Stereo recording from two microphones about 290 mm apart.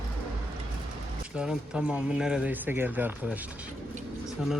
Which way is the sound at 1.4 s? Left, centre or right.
Centre.